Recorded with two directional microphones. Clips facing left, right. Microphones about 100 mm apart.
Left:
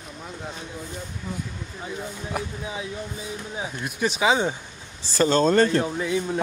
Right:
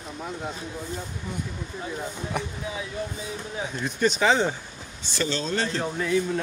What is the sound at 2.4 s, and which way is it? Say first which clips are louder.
Speech: left 1 dB; 5° left (ahead or behind).